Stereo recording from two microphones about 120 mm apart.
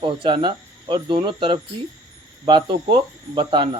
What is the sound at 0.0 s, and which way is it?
Speech, 45° right (ahead or behind).